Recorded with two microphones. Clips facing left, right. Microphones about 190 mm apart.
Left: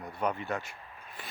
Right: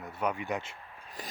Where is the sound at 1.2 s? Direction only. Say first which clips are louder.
Right 4 dB; 40° right (ahead or behind).